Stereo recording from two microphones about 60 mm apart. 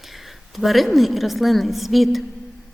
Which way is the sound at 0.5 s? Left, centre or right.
Centre.